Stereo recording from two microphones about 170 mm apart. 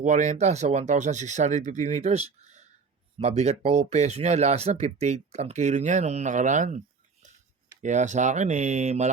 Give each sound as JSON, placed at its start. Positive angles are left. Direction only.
{"t": 0.0, "sound": "speech", "side_deg": -45}